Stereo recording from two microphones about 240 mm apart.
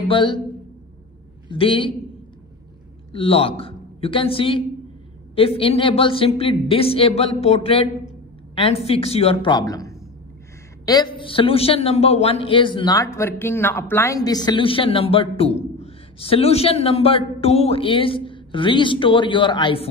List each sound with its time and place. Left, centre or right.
0.1 s a man's voice: left
1.5 s a man's voice: left
3.1 s a woman's voice: left